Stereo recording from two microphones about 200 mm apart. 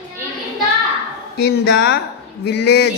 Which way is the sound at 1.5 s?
60° left (ahead or behind).